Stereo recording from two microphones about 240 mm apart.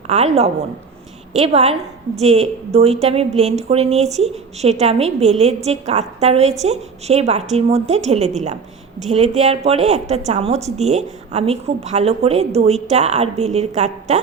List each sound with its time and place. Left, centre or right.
0.1 s a woman's voice: right